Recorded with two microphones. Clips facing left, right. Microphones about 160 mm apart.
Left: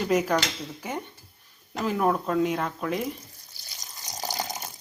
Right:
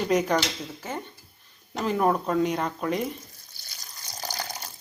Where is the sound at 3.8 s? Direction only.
15° left (ahead or behind).